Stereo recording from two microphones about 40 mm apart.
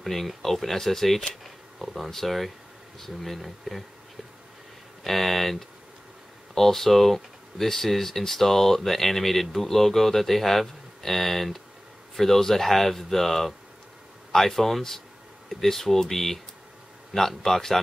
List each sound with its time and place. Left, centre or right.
0.0 s speech: centre
5.0 s speech: centre